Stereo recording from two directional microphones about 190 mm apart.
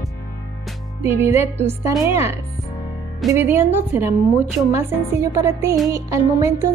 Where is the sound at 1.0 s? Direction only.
10° right (ahead or behind).